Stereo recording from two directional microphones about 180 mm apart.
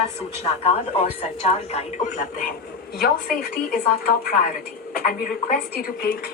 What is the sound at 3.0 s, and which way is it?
A woman's voice, 55° left (ahead or behind).